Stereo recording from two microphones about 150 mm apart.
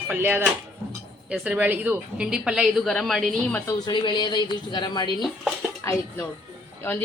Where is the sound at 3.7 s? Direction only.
25° left (ahead or behind).